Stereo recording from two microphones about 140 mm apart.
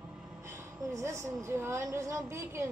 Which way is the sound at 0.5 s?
20° right (ahead or behind).